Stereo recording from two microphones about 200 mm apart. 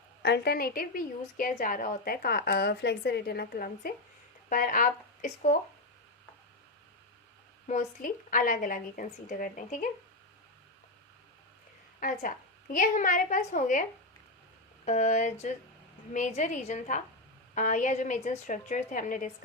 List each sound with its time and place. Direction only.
0.2 s a woman's voice: 55° left (ahead or behind); by 5.5 s 40° left (ahead or behind)
7.7 s a woman's voice: 40° left (ahead or behind)
11.9 s a woman's voice: 40° left (ahead or behind)
14.8 s a woman's voice: 35° left (ahead or behind)